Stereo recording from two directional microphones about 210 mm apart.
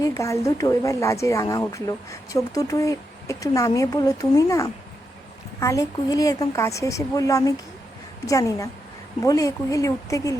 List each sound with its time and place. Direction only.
0.0 s a woman's voice: 15° left (ahead or behind)